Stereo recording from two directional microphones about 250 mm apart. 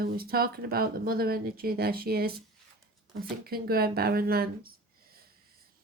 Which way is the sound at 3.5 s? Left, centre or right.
Right.